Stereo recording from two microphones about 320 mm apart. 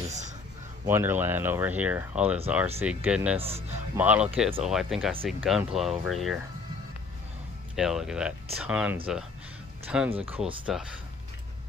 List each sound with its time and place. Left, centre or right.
0.8 s speech: centre
3.3 s speech: centre
3.9 s speech: centre
7.7 s speech: centre